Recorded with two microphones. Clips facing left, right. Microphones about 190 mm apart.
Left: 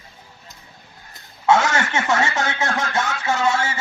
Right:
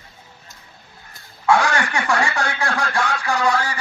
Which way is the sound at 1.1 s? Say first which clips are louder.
Even; 20° left (ahead or behind).